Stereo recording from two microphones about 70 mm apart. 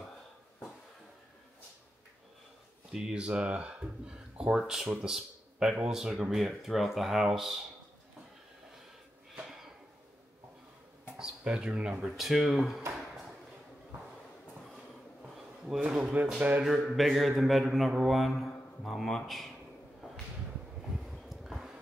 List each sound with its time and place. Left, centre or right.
2.9 s speech: centre
9.3 s a sound: centre
11.1 s speech: centre
12.0 s speech: centre
15.2 s bee: centre
15.9 s speech: centre
16.6 s speech: centre
21.0 s a sound: centre